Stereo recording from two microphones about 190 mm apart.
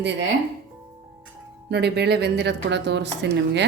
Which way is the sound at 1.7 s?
60° right (ahead or behind).